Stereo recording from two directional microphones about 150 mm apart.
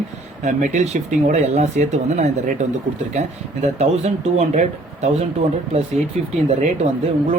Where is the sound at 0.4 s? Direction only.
55° right (ahead or behind).